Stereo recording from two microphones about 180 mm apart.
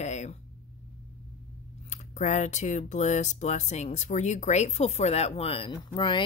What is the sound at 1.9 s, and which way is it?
Speech, 40° left (ahead or behind).